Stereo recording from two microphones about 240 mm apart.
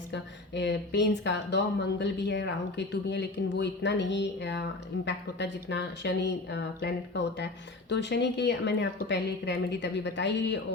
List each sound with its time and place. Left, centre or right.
0.5 s speech: left